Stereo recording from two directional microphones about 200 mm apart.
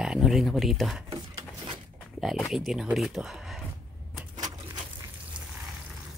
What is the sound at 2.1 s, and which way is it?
Speech, centre (ahead or behind).